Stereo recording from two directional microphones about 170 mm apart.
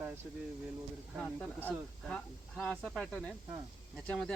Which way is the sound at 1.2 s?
5° left (ahead or behind).